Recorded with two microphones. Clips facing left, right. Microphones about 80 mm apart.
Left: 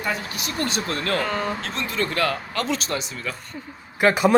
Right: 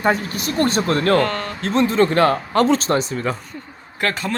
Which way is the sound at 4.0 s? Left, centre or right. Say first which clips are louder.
Left 5 dB; centre.